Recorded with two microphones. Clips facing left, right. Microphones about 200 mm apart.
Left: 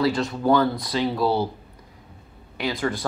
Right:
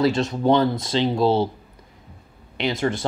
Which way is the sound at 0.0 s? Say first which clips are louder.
Right 2 dB; 20° right (ahead or behind).